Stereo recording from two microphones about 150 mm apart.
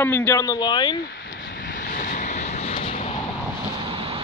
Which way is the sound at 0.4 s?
25° left (ahead or behind).